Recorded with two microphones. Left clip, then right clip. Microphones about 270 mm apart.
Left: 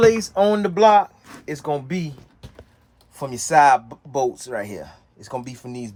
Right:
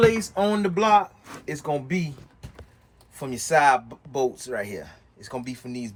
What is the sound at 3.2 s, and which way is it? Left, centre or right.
Speech, left.